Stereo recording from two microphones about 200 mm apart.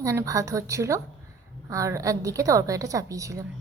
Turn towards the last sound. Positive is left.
turn(degrees=-15)  # may be behind; listen again after turning